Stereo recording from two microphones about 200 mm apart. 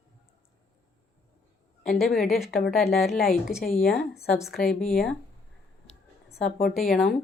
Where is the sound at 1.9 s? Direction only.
Centre (ahead or behind).